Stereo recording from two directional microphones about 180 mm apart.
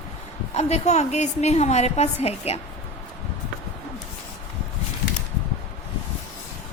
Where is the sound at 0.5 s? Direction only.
35° left (ahead or behind).